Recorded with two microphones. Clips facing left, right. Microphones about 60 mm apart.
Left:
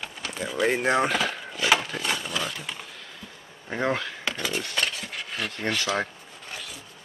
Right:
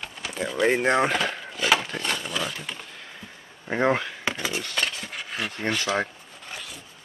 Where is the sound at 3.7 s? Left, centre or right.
Centre.